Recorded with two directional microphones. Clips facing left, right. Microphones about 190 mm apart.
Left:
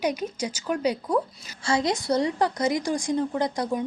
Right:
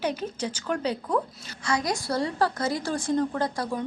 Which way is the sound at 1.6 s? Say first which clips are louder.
Left 3 dB; 25° left (ahead or behind).